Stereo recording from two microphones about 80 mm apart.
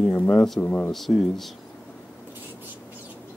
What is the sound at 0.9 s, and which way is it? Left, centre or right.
Speech, centre.